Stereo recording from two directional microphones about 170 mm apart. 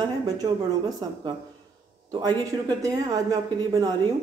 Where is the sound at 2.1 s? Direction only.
20° right (ahead or behind).